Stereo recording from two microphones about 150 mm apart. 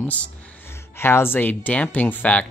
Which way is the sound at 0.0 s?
10° left (ahead or behind).